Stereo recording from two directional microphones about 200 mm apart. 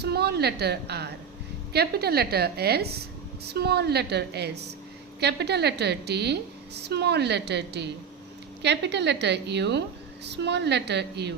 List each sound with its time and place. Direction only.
0.0 s a woman's voice: 55° right (ahead or behind)